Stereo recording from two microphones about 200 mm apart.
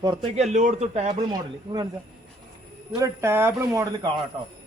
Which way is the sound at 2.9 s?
15° right (ahead or behind).